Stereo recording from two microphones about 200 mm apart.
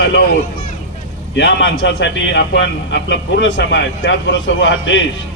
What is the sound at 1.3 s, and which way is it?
A man's voice, 60° left (ahead or behind).